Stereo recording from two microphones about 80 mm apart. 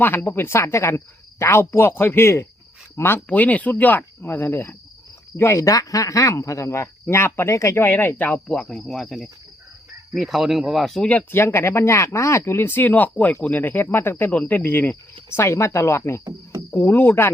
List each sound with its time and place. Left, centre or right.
0.0 s speech: left
3.2 s speech: centre
5.4 s speech: left
8.6 s speech: centre
11.3 s speech: left